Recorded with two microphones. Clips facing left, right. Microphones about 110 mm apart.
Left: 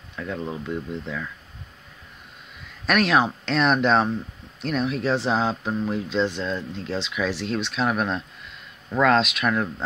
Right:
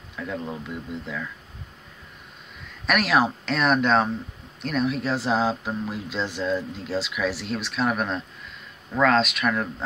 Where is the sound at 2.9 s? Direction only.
Centre (ahead or behind).